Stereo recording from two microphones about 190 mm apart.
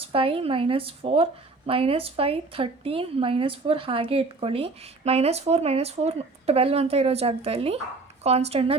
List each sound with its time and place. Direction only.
0.1 s speech: 30° right (ahead or behind)